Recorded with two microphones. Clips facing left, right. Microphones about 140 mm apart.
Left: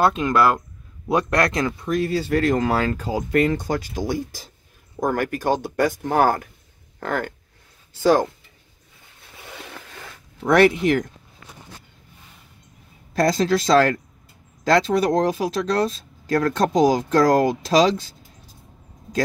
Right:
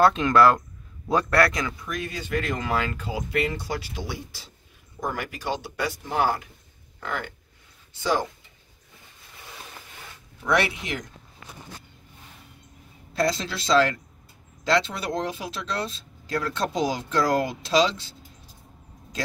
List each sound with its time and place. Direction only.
0.0 s speech: 5° left (ahead or behind)
1.0 s speech: 15° left (ahead or behind); by 8.3 s 45° left (ahead or behind)
9.7 s a sound: 75° left (ahead or behind)
10.4 s speech: 50° left (ahead or behind)
13.1 s speech: 50° left (ahead or behind)